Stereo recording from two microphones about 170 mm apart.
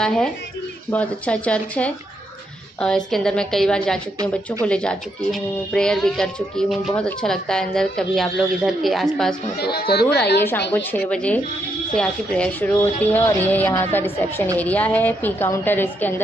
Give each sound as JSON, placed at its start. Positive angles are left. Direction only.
{"t": 0.0, "sound": "speech", "side_deg": 5}
{"t": 9.6, "sound": "speech", "side_deg": 70}
{"t": 10.7, "sound": "speech", "side_deg": 10}